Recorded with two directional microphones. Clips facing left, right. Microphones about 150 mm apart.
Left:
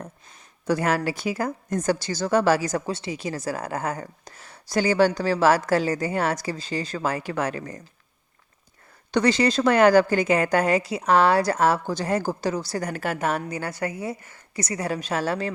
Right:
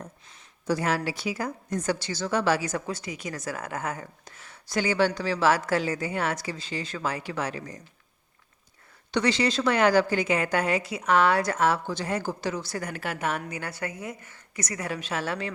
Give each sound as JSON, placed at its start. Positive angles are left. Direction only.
{"t": 0.0, "sound": "a woman's voice", "side_deg": 55}
{"t": 9.1, "sound": "a woman's voice", "side_deg": 45}